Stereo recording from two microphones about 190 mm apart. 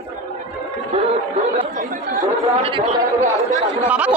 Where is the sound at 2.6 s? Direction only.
30° right (ahead or behind).